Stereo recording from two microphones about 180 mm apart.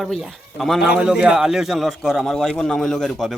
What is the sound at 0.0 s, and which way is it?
A man's voice, centre (ahead or behind).